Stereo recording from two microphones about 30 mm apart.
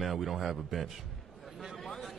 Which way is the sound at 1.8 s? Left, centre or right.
Centre.